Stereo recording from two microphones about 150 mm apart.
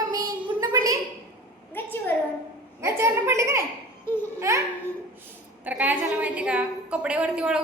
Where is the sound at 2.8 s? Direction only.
20° right (ahead or behind).